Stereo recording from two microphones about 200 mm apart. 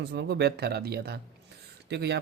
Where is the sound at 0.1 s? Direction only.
55° right (ahead or behind).